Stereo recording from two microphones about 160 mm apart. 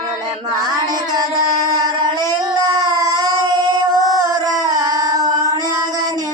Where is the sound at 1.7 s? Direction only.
25° right (ahead or behind).